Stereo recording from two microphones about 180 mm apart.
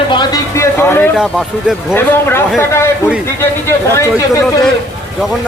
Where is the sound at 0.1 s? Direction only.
25° left (ahead or behind).